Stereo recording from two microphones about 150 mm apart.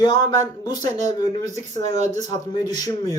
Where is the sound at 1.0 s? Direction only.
50° right (ahead or behind).